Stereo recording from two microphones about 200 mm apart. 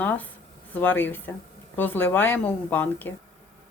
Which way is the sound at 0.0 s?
10° left (ahead or behind).